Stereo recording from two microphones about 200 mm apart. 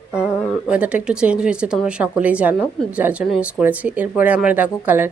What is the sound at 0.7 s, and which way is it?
Speech, 5° right (ahead or behind).